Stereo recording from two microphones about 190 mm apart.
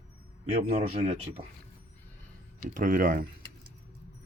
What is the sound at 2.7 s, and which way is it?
Speech, 45° right (ahead or behind).